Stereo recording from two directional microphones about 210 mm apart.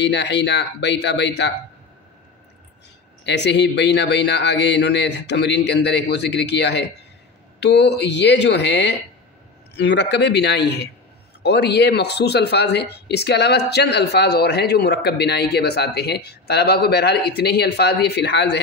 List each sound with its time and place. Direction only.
0.0 s a man's voice: 55° left (ahead or behind)
3.3 s a man's voice: 55° left (ahead or behind)